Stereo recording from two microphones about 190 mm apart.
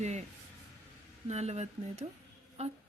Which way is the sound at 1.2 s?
35° right (ahead or behind).